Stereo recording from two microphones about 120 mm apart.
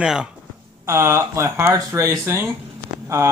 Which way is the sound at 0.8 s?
25° right (ahead or behind).